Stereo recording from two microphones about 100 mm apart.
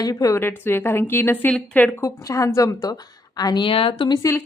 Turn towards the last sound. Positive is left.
turn(degrees=30)  # may be behind; listen again after turning